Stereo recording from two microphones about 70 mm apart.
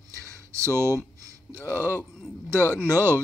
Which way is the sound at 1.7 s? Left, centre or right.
Right.